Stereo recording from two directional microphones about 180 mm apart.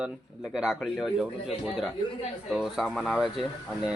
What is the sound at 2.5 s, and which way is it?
Speech, centre (ahead or behind).